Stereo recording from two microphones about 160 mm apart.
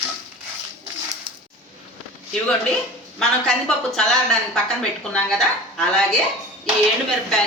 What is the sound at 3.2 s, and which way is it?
A woman's voice, centre (ahead or behind).